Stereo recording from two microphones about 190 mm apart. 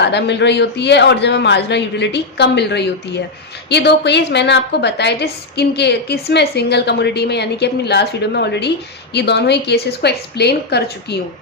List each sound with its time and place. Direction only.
0.0 s a woman's voice: 65° left (ahead or behind)